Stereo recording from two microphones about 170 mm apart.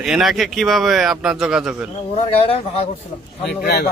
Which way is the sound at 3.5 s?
70° left (ahead or behind).